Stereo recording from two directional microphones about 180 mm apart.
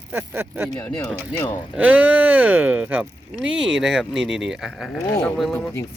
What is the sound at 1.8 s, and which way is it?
Speech, 5° right (ahead or behind).